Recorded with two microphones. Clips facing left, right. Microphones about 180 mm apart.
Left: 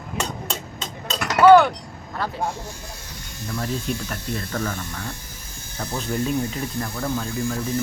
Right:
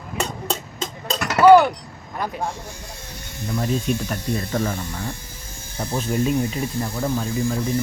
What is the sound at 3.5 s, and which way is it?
Speech, 20° right (ahead or behind).